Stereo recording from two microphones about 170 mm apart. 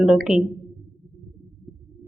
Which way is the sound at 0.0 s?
5° right (ahead or behind).